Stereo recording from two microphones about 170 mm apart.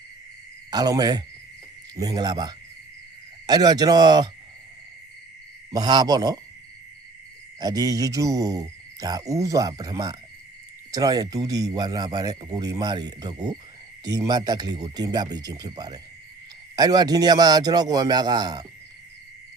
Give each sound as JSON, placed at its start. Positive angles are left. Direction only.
{"t": 0.7, "sound": "speech", "side_deg": -20}
{"t": 5.7, "sound": "speech", "side_deg": -25}
{"t": 7.6, "sound": "speech", "side_deg": -20}